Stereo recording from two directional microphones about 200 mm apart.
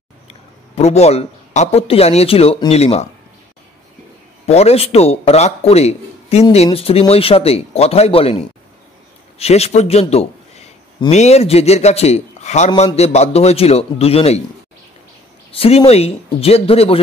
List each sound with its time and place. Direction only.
0.3 s speech: 35° left (ahead or behind)
4.5 s a man's voice: 30° left (ahead or behind)
15.5 s speech: 30° left (ahead or behind)